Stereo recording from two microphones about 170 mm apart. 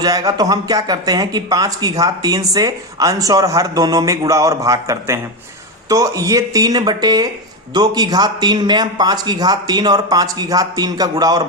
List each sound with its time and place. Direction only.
0.0 s speech: 20° right (ahead or behind)